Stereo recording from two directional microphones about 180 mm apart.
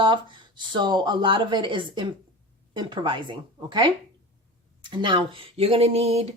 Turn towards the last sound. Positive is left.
turn(degrees=-35)  # may be behind; listen again after turning